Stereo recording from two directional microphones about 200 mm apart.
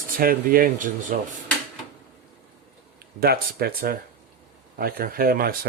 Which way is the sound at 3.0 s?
50° right (ahead or behind).